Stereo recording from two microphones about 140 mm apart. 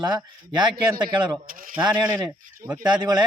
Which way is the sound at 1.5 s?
80° right.